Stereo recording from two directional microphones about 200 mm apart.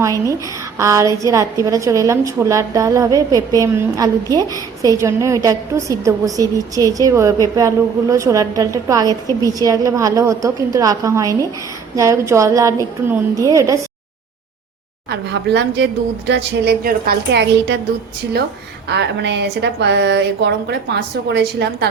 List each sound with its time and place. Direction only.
0.0 s a woman's voice: 15° right (ahead or behind)
15.1 s a woman's voice: 60° right (ahead or behind)
18.9 s a woman's voice: 60° right (ahead or behind)